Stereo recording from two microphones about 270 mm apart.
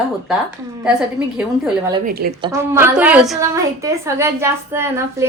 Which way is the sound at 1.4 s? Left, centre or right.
Centre.